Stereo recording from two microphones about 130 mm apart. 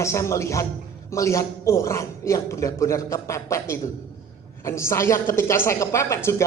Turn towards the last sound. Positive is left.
turn(degrees=20)  # may be behind; listen again after turning